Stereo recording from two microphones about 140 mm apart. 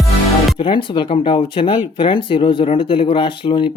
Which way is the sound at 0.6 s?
35° left (ahead or behind).